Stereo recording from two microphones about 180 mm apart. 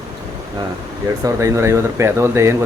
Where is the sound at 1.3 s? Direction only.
15° right (ahead or behind).